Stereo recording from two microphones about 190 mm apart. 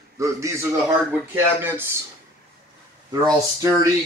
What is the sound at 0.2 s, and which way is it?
Speech, 15° right (ahead or behind).